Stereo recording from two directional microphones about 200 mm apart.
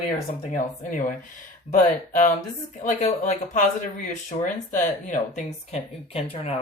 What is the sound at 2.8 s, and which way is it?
Speech, 40° left (ahead or behind).